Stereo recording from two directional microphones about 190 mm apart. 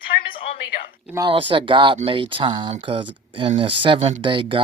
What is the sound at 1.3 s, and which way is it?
Speech, 25° right (ahead or behind).